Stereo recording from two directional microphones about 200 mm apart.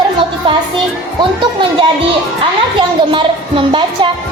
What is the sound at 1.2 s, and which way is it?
Speech, 25° right (ahead or behind).